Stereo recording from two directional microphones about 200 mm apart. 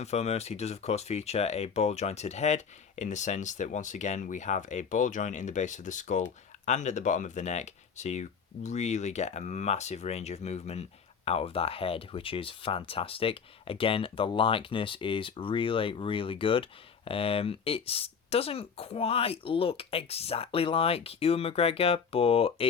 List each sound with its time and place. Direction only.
0.0 s speech: 35° left (ahead or behind)